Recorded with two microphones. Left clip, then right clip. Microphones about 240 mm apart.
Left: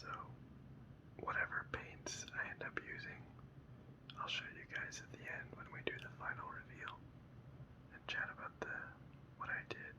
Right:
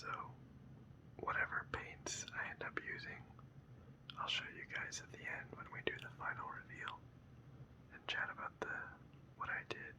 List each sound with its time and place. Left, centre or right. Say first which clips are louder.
0.0 s whispering: right 3 dB; centre
8.0 s whispering: right 2 dB; centre